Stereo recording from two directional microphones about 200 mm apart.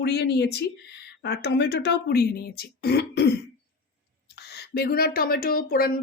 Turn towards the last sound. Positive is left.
turn(degrees=50)  # may be behind; listen again after turning